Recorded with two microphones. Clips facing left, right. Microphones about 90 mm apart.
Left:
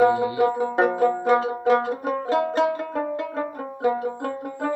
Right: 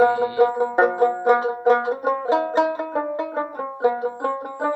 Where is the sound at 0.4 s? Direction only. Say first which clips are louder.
Right 2 dB; 15° right (ahead or behind).